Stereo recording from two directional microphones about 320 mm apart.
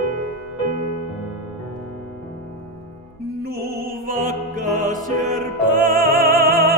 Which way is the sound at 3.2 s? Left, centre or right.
Right.